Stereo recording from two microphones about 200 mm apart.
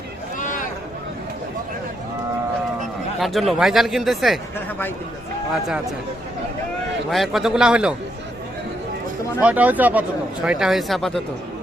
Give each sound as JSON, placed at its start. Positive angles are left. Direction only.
{"t": 0.3, "sound": "a sound", "side_deg": 40}
{"t": 3.2, "sound": "speech", "side_deg": 0}
{"t": 7.1, "sound": "speech", "side_deg": 0}
{"t": 9.4, "sound": "speech", "side_deg": -5}